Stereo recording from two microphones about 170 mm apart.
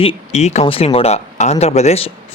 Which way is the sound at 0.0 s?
35° left (ahead or behind).